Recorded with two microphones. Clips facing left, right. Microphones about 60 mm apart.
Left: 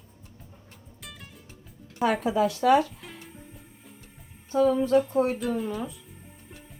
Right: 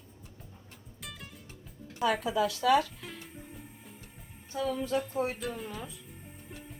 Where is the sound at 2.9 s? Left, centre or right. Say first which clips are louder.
Left 1 dB; centre.